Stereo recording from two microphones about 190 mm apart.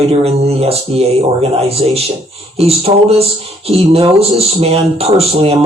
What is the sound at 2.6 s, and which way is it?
A man's voice, 30° right (ahead or behind).